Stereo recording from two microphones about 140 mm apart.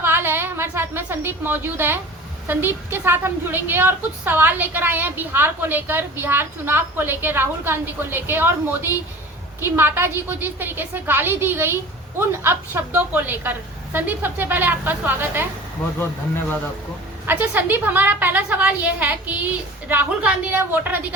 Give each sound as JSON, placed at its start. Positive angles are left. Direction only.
{"t": 0.0, "sound": "a sound", "side_deg": -15}
{"t": 2.5, "sound": "a woman's voice", "side_deg": -15}
{"t": 17.2, "sound": "a woman's voice", "side_deg": -15}